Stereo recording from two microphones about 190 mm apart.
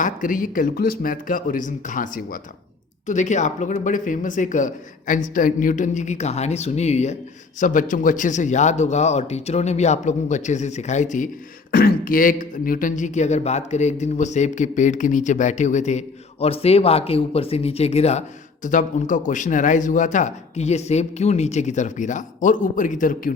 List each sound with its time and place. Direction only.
0.0 s speech: 45° left (ahead or behind)
11.7 s speech: 55° left (ahead or behind)